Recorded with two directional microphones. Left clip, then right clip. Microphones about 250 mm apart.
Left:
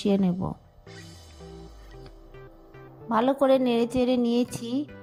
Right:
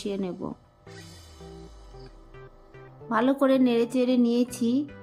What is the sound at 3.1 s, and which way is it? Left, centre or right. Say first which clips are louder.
A woman's voice: left 2 dB; left.